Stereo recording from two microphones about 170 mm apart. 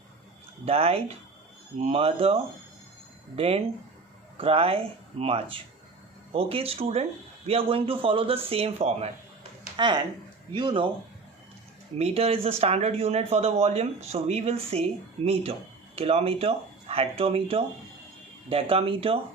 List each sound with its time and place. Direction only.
0.6 s speech: 35° right (ahead or behind)
11.9 s speech: 35° right (ahead or behind)